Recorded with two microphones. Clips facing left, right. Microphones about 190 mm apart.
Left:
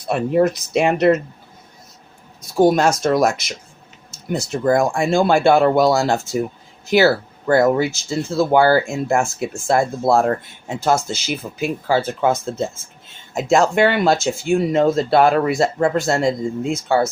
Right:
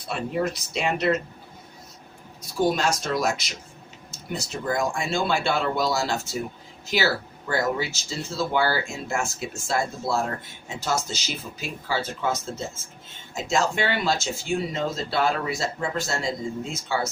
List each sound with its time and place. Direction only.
0.1 s speech: 50° left (ahead or behind)
2.6 s speech: 50° left (ahead or behind)